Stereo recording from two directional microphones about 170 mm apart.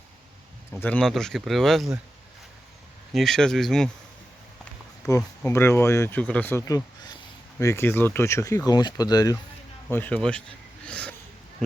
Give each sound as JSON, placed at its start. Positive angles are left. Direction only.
{"t": 0.7, "sound": "speech", "side_deg": 10}
{"t": 3.1, "sound": "speech", "side_deg": 0}
{"t": 5.4, "sound": "speech", "side_deg": 15}
{"t": 9.9, "sound": "speech", "side_deg": 10}
{"t": 10.8, "sound": "wheeze", "side_deg": 5}